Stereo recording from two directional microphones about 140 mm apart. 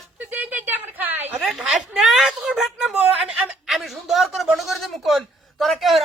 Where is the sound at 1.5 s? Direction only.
5° right (ahead or behind).